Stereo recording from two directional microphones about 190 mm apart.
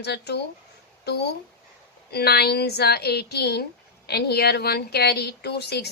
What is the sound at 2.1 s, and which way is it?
A woman's voice, 55° left (ahead or behind).